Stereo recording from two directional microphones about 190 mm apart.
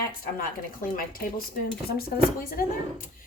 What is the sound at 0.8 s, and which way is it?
Speech, 50° left (ahead or behind).